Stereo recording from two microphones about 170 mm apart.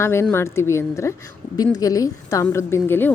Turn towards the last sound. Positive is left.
turn(degrees=10)  # may be behind; listen again after turning